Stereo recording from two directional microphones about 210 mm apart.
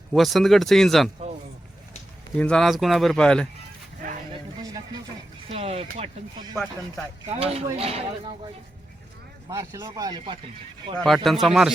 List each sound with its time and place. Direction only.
0.1 s speech: centre (ahead or behind)
2.3 s speech: 5° left (ahead or behind)
5.5 s a sound: 30° right (ahead or behind)
6.0 s a man's voice: 20° right (ahead or behind)
7.3 s a man's voice: 30° right (ahead or behind)
9.5 s speech: 15° right (ahead or behind)
10.9 s speech: centre (ahead or behind)